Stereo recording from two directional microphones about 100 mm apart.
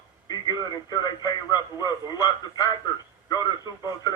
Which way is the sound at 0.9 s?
40° left (ahead or behind).